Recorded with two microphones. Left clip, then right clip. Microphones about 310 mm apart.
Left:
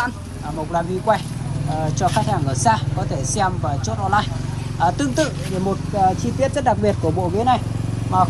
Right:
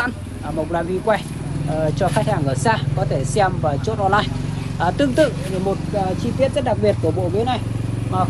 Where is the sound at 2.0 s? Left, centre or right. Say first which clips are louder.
Left 2 dB; centre.